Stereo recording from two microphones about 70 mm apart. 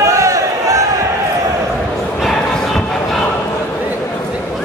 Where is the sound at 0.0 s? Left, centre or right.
Right.